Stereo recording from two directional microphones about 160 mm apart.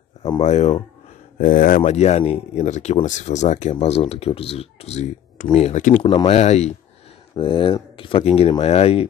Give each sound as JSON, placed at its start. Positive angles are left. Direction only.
{"t": 0.4, "sound": "speech", "side_deg": 45}
{"t": 1.4, "sound": "speech", "side_deg": 60}
{"t": 1.8, "sound": "speech", "side_deg": 45}
{"t": 3.7, "sound": "speech", "side_deg": 40}
{"t": 6.2, "sound": "speech", "side_deg": 40}